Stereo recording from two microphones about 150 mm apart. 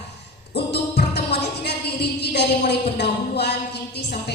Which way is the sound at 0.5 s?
90° left.